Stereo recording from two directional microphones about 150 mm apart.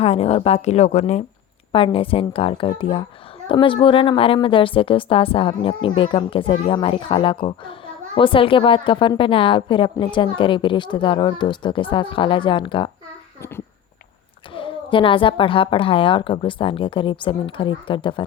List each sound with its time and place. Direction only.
0.0 s a woman's voice: 40° left (ahead or behind)
1.7 s a woman's voice: 35° left (ahead or behind)
14.5 s a woman's voice: 35° left (ahead or behind)